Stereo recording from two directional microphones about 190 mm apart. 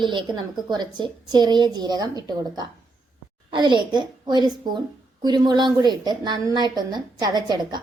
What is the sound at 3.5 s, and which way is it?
A woman's voice, 25° right (ahead or behind).